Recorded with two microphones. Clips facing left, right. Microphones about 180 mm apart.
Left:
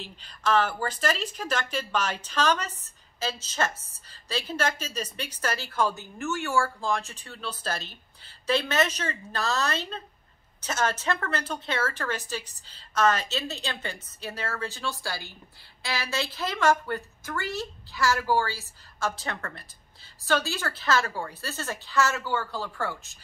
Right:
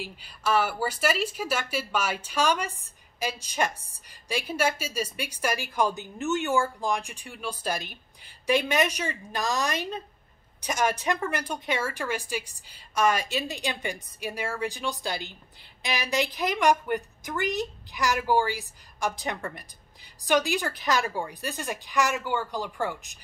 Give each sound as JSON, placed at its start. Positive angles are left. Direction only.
{"t": 0.0, "sound": "speech", "side_deg": -10}